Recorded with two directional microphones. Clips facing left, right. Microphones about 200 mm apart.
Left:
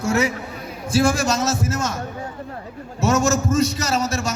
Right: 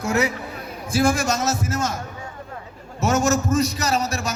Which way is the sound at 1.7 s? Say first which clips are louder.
Even; 30° right (ahead or behind).